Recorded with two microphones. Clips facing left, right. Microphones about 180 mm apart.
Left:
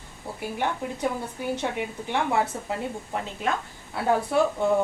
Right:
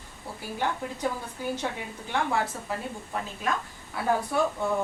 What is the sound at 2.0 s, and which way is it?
Speech, 25° left (ahead or behind).